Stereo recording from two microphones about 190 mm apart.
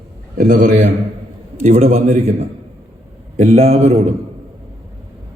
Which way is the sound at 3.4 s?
35° right (ahead or behind).